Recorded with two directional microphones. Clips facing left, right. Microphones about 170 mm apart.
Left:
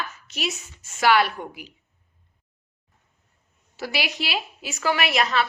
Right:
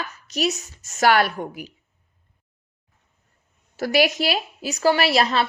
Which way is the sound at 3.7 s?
45° right (ahead or behind).